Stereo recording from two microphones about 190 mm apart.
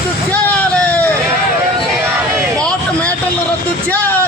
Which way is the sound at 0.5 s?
10° left (ahead or behind).